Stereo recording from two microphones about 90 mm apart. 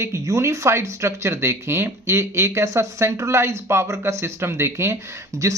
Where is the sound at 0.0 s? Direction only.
35° right (ahead or behind).